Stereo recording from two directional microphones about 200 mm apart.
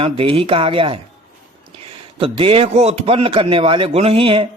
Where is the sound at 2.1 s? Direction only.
25° right (ahead or behind).